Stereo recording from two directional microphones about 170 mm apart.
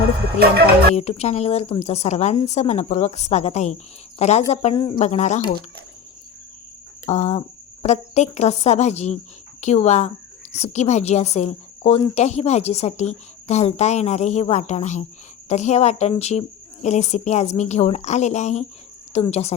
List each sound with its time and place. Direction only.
0.3 s music: 65° right (ahead or behind)
0.9 s speech: 40° left (ahead or behind)
4.9 s speech: 40° left (ahead or behind)
7.0 s speech: 40° left (ahead or behind)